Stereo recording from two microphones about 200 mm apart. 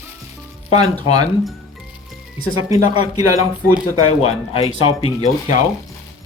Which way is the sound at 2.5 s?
15° right (ahead or behind).